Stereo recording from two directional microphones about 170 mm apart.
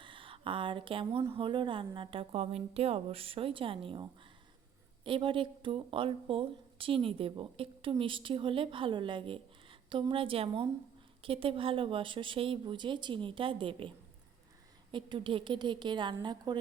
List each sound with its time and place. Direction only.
0.0 s speech: 30° right (ahead or behind)
14.9 s a woman's voice: 30° right (ahead or behind)